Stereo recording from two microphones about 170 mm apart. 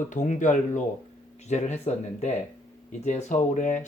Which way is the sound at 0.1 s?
45° left (ahead or behind).